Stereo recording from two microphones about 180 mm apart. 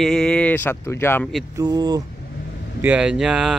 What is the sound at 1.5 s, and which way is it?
Speech, 20° right (ahead or behind).